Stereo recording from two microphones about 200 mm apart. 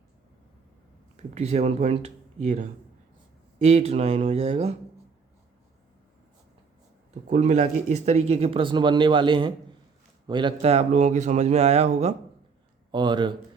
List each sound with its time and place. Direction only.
1.1 s speech: 35° right (ahead or behind)
7.1 s speech: 35° right (ahead or behind)
12.9 s speech: 25° right (ahead or behind)